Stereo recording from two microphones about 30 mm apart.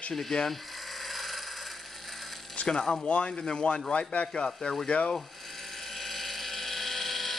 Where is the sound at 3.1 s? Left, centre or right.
Left.